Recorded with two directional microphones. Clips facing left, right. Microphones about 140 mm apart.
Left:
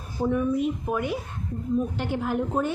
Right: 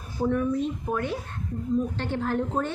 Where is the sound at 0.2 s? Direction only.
5° left (ahead or behind).